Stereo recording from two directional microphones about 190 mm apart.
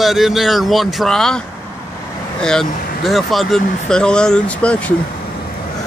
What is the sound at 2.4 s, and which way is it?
Speech, centre (ahead or behind).